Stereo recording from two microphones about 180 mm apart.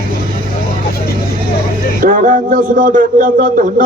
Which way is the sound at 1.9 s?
45° right (ahead or behind).